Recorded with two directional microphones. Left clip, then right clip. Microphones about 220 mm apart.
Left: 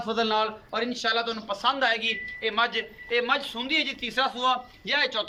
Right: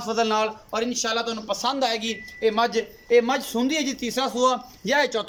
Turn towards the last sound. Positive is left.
turn(degrees=-35)  # may be behind; listen again after turning